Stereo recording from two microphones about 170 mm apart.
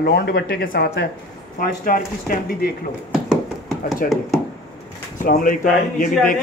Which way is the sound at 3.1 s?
5° right (ahead or behind).